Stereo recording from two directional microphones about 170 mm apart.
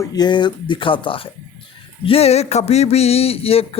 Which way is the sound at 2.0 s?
35° left (ahead or behind).